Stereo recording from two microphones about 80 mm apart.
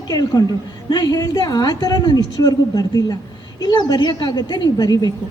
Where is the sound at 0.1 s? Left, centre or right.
Left.